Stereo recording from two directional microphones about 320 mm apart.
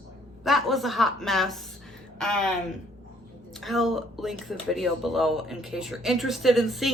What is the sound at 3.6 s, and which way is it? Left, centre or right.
Speech, centre.